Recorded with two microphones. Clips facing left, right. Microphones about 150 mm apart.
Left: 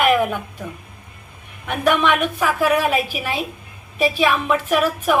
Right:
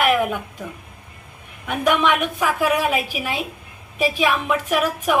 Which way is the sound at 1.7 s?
10° right (ahead or behind).